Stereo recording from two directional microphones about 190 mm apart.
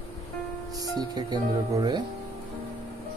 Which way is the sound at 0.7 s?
20° right (ahead or behind).